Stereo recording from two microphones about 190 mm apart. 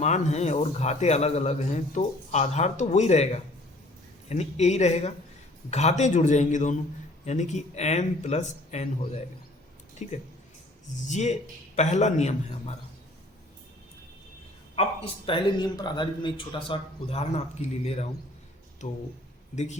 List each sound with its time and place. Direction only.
0.0 s a man's voice: 35° left (ahead or behind)
14.8 s speech: 30° left (ahead or behind)
19.5 s a man's voice: 35° left (ahead or behind)